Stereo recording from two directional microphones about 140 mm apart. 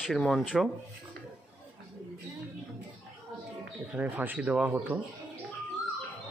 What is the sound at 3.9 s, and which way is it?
Speech, 10° right (ahead or behind).